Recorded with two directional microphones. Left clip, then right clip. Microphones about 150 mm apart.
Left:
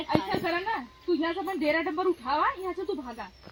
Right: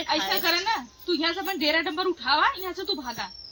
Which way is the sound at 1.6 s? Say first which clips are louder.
Right 1 dB; 15° right (ahead or behind).